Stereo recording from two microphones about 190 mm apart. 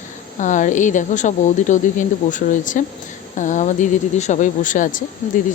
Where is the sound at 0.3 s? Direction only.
40° left (ahead or behind).